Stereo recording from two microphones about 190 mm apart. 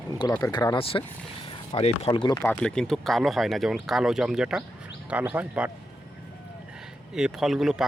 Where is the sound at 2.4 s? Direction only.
5° left (ahead or behind).